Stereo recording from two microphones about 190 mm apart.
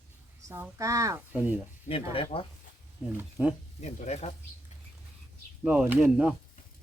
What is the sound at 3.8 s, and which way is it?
Speech, 35° left (ahead or behind).